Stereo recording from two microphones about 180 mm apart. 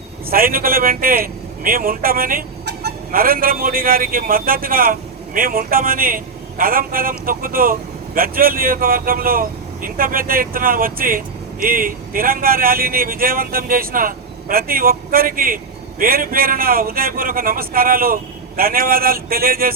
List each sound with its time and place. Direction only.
0.3 s a man's voice: 55° right (ahead or behind)